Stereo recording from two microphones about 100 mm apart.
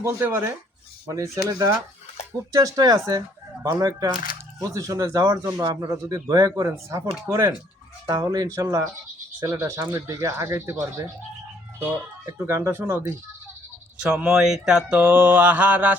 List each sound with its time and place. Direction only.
0.0 s speech: 25° right (ahead or behind)
12.2 s speech: 25° right (ahead or behind)
14.0 s speech: 10° right (ahead or behind)